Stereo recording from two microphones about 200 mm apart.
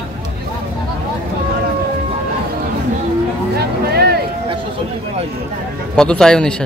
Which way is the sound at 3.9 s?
55° right (ahead or behind).